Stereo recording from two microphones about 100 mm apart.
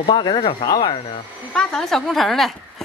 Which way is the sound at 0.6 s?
40° left (ahead or behind).